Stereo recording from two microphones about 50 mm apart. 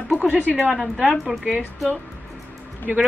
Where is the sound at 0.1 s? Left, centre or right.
Right.